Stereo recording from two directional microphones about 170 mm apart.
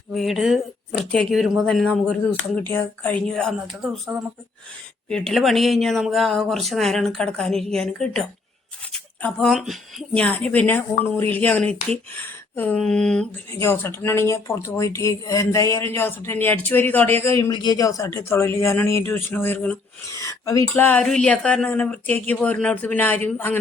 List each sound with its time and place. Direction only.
0.1 s speech: centre (ahead or behind)
13.6 s speech: 15° left (ahead or behind)